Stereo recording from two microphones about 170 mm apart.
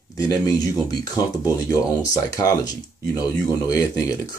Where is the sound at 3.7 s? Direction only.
20° left (ahead or behind).